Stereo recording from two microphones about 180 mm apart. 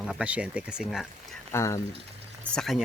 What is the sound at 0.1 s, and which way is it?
Speech, 5° right (ahead or behind).